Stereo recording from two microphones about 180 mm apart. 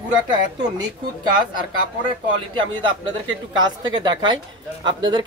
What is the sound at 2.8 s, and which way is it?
Speech, 25° right (ahead or behind).